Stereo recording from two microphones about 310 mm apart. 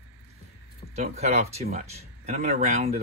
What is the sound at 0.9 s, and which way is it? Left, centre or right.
Speech, right.